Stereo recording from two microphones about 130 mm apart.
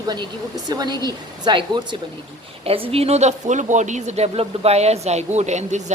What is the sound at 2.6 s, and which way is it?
Speech, 45° right (ahead or behind).